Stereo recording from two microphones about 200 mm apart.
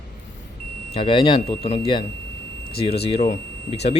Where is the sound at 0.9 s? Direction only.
25° left (ahead or behind).